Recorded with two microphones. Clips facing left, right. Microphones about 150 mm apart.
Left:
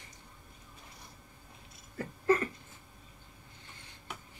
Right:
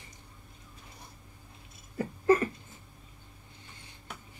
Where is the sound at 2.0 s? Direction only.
20° right (ahead or behind).